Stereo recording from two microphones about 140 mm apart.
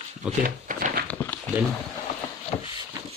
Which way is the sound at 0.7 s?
70° right (ahead or behind).